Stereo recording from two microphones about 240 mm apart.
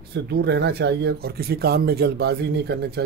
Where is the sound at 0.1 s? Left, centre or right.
Right.